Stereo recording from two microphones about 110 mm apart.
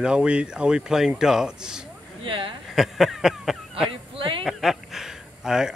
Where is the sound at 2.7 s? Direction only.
Centre (ahead or behind).